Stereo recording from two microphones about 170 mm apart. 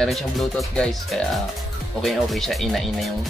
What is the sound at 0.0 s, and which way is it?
Speech, centre (ahead or behind).